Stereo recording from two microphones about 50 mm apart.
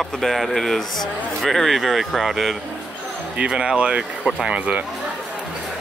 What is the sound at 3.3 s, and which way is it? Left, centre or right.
Speech, centre.